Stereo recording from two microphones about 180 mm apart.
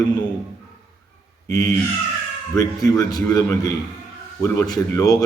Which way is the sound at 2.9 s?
20° left (ahead or behind).